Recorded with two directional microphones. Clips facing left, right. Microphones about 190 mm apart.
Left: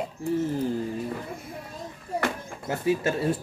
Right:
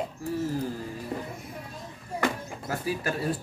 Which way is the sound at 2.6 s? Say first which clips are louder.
Left 5 dB; 25° left (ahead or behind).